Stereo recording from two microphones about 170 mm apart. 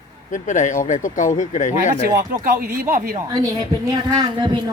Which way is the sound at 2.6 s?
60° right (ahead or behind).